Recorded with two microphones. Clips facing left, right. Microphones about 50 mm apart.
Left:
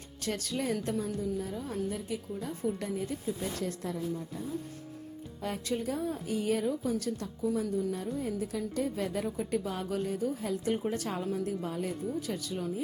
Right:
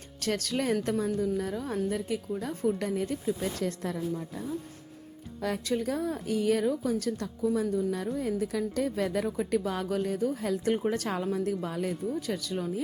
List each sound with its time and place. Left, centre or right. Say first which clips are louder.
0.2 s a woman's voice: right 4 dB; right
5.4 s a woman's voice: right 5 dB; right
5.7 s a woman's voice: right 2 dB; right
9.4 s a woman's voice: right 4 dB; right